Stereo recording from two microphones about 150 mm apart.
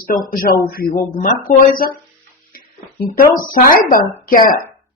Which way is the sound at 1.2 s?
65° left (ahead or behind).